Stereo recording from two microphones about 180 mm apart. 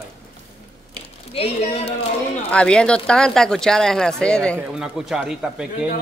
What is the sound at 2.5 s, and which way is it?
Speech, 5° left (ahead or behind).